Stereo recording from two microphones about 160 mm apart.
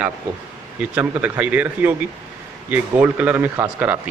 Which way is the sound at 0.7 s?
10° right (ahead or behind).